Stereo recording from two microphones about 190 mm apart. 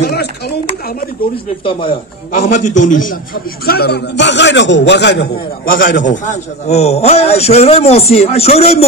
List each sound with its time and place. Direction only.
0.0 s speech: 55° left (ahead or behind)
1.6 s speech: 25° left (ahead or behind)
2.3 s a man's voice: 40° left (ahead or behind)
3.6 s a man's voice: 55° left (ahead or behind)
5.9 s a man's voice: 40° left (ahead or behind)